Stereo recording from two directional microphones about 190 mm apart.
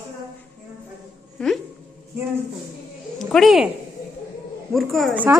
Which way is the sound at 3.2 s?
Centre (ahead or behind).